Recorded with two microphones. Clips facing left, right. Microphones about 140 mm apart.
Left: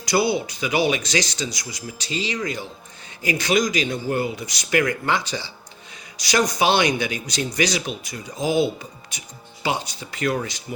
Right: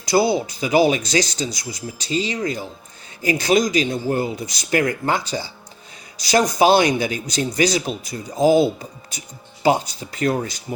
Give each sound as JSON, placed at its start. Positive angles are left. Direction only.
{"t": 0.1, "sound": "speech", "side_deg": -30}